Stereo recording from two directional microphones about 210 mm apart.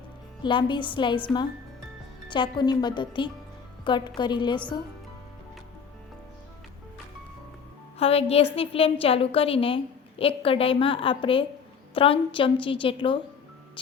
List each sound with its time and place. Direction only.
0.4 s a woman's voice: 20° left (ahead or behind)
7.9 s a woman's voice: 30° left (ahead or behind)